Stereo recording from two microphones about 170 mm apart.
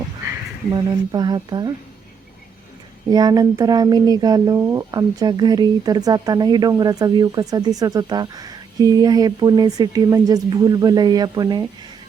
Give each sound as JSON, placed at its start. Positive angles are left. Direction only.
{"t": 0.7, "sound": "speech", "side_deg": -25}
{"t": 3.1, "sound": "speech", "side_deg": -25}